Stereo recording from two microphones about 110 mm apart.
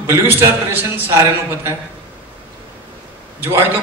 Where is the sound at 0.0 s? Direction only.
25° right (ahead or behind).